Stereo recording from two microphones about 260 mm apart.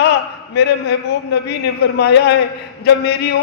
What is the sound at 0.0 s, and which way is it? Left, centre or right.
A man's voice, left.